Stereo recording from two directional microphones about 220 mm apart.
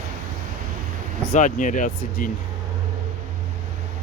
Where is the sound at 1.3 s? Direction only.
35° left (ahead or behind).